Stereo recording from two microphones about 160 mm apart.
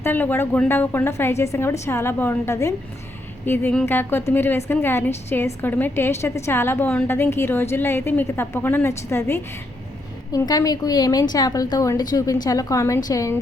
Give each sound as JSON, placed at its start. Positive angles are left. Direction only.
{"t": 0.0, "sound": "a woman's voice", "side_deg": 10}